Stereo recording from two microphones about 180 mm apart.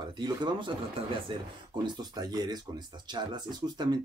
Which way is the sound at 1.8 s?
20° right (ahead or behind).